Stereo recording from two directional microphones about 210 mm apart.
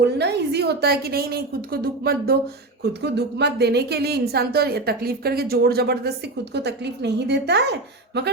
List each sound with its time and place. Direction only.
0.0 s a woman's voice: 55° right (ahead or behind)